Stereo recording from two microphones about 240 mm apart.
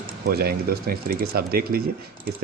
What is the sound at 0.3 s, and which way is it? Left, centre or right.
Speech, right.